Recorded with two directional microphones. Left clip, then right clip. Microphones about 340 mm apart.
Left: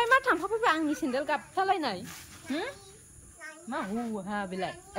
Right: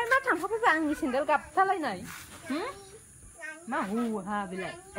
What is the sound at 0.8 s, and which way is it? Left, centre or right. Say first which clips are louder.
Speech: even; right.